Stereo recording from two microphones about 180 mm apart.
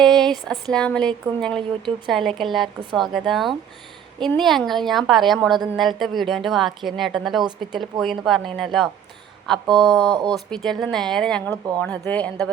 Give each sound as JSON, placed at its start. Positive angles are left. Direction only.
{"t": 0.0, "sound": "a sound", "side_deg": 0}
{"t": 0.7, "sound": "speech", "side_deg": 5}
{"t": 9.6, "sound": "speech", "side_deg": -25}
{"t": 10.3, "sound": "speech", "side_deg": 0}